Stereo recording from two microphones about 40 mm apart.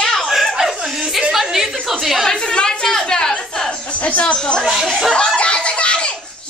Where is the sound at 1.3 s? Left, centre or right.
Centre.